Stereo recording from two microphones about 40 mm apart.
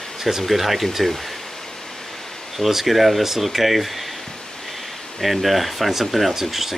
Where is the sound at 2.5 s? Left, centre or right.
Centre.